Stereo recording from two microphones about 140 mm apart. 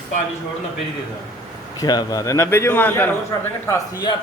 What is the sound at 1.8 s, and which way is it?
Speech, 30° left (ahead or behind).